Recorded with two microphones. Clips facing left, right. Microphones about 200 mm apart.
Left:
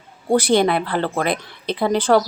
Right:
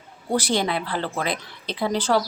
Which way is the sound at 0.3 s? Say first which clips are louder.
Left 7 dB; 55° left (ahead or behind).